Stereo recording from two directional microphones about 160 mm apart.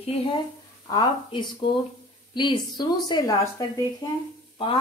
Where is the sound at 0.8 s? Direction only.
25° left (ahead or behind).